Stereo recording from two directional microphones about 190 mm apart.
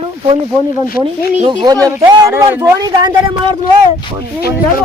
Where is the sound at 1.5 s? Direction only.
25° right (ahead or behind).